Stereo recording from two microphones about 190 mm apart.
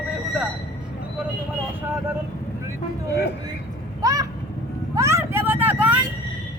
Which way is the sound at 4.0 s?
20° right (ahead or behind).